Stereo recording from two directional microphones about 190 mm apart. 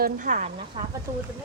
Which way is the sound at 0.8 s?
25° right (ahead or behind).